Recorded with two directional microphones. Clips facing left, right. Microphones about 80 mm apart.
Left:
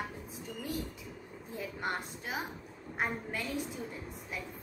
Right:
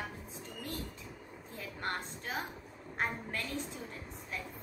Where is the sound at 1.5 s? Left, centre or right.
Centre.